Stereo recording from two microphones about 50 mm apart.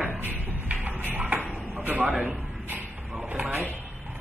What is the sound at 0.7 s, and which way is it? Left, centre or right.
Shuffle, right.